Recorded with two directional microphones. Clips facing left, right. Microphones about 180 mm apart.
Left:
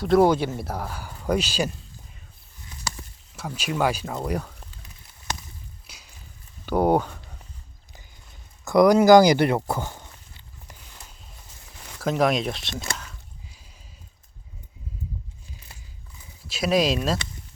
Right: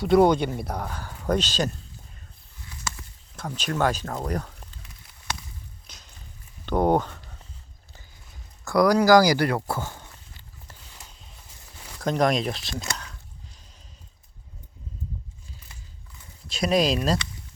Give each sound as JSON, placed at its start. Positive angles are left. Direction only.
{"t": 0.0, "sound": "speech", "side_deg": 0}
{"t": 3.3, "sound": "speech", "side_deg": 5}
{"t": 5.9, "sound": "a sound", "side_deg": 10}
{"t": 8.6, "sound": "speech", "side_deg": 20}
{"t": 10.7, "sound": "a sound", "side_deg": 5}
{"t": 16.5, "sound": "speech", "side_deg": 0}